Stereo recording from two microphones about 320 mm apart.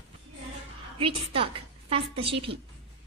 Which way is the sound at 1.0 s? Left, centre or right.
Centre.